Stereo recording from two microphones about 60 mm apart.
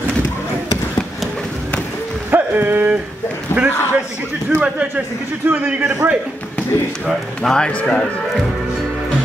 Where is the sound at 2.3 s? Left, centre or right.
Right.